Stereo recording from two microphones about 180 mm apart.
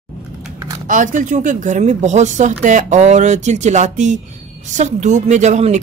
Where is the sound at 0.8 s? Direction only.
45° right (ahead or behind).